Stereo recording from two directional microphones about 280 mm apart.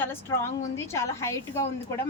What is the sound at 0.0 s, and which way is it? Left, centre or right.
A woman's voice, centre.